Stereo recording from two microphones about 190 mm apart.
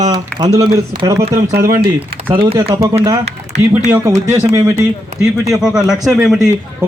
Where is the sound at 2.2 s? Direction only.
25° right (ahead or behind).